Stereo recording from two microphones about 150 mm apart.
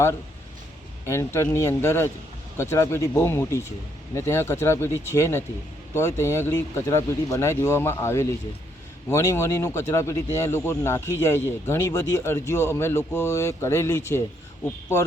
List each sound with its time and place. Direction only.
1.0 s speech: 20° left (ahead or behind)